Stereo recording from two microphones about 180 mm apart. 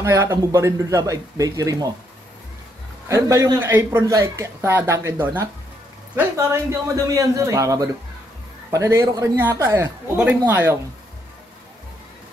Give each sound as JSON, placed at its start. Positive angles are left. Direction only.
{"t": 0.0, "sound": "speech", "side_deg": -15}
{"t": 3.1, "sound": "speech", "side_deg": -15}